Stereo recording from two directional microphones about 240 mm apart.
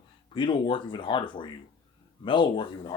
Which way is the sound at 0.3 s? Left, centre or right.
Centre.